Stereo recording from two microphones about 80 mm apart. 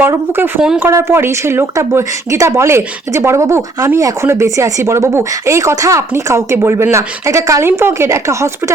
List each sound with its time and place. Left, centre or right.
0.3 s speech: right